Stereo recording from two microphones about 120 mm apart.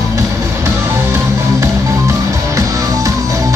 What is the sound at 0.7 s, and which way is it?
Music, 20° right (ahead or behind).